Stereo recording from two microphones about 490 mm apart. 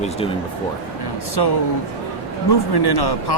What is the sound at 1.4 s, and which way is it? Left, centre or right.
Speech, left.